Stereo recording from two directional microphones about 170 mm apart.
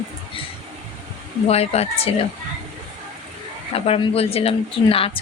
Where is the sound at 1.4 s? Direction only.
40° left (ahead or behind).